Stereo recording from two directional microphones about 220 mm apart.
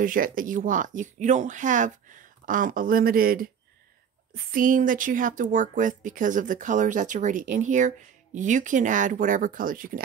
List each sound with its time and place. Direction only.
0.0 s speech: 40° right (ahead or behind)